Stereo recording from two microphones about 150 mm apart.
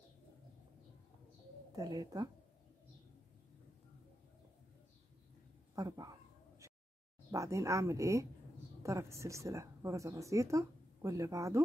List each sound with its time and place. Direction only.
1.8 s a woman's voice: 25° right (ahead or behind)
5.8 s speech: 25° right (ahead or behind)
7.2 s a woman's voice: 20° right (ahead or behind)